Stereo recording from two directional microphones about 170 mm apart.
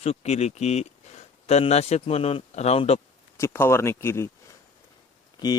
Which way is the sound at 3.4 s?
15° left (ahead or behind).